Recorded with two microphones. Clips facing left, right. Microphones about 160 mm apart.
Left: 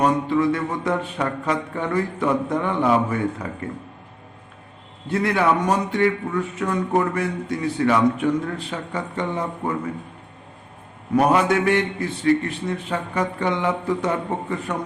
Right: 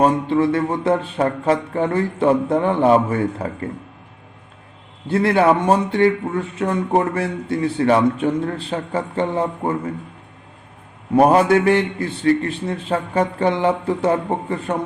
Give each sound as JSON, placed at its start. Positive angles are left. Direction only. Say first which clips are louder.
{"t": 0.0, "sound": "a man's voice", "louder": "right 3 dB", "side_deg": -30}
{"t": 5.0, "sound": "a man's voice", "louder": "right 5 dB", "side_deg": -30}
{"t": 11.1, "sound": "a man's voice", "louder": "right 5 dB", "side_deg": -35}